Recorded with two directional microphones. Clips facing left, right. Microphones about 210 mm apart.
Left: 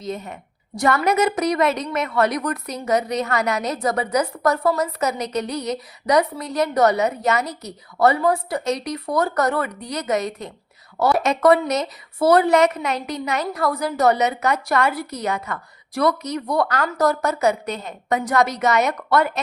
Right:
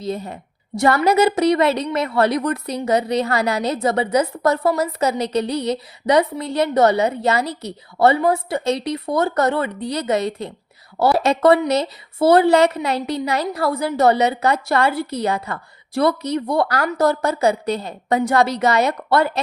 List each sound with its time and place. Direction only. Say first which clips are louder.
0.0 s a woman's voice: right 3 dB; 30° right (ahead or behind)